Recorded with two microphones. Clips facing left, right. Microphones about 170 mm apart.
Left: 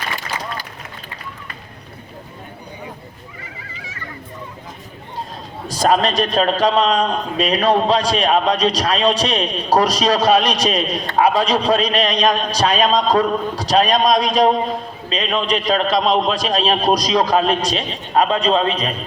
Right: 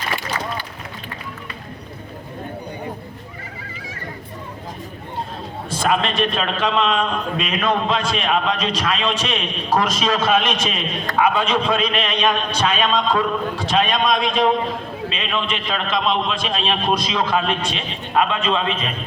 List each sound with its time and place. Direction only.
5.6 s a man's voice: 40° left (ahead or behind)